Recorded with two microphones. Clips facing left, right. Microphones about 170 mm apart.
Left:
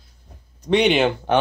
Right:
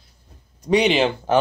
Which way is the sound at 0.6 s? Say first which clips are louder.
Even; 5° right (ahead or behind).